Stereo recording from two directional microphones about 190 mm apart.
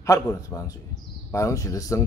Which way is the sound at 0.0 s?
15° left (ahead or behind).